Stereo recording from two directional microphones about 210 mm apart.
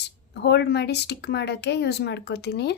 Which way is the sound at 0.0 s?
55° left (ahead or behind).